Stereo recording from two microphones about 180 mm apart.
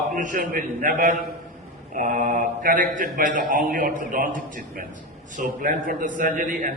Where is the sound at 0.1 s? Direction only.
50° right (ahead or behind).